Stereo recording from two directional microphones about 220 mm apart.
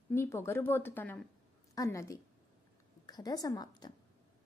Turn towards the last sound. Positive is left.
turn(degrees=15)  # may be behind; listen again after turning